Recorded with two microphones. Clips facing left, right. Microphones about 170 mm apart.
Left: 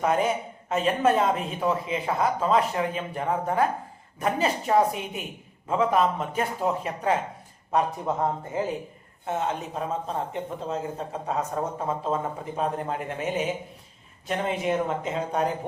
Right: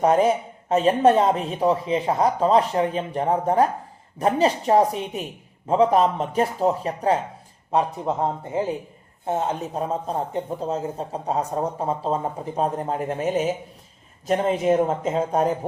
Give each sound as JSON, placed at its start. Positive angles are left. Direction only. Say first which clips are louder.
{"t": 0.0, "sound": "a man's voice", "louder": "right 6 dB", "side_deg": -35}
{"t": 7.7, "sound": "a man's voice", "louder": "right 2 dB", "side_deg": -25}
{"t": 9.2, "sound": "a man's voice", "louder": "right 4 dB", "side_deg": -35}